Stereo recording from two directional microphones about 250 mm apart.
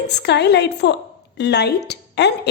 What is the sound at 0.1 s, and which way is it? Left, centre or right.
A woman's voice, left.